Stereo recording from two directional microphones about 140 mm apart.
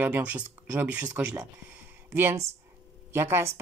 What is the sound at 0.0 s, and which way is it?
Speech, 10° right (ahead or behind).